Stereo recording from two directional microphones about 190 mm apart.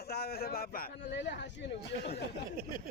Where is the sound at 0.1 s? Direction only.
55° left (ahead or behind).